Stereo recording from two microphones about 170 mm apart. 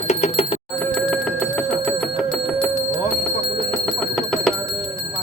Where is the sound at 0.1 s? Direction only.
40° left (ahead or behind).